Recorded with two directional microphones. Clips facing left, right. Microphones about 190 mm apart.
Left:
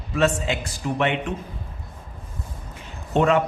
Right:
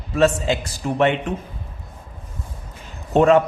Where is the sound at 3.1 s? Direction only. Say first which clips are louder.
Right 5 dB; 40° right (ahead or behind).